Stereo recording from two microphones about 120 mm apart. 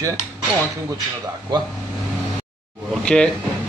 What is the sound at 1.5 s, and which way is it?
Speech, 35° right (ahead or behind).